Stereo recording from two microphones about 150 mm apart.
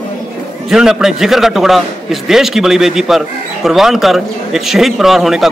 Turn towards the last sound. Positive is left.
turn(degrees=0)  # may be behind; listen again after turning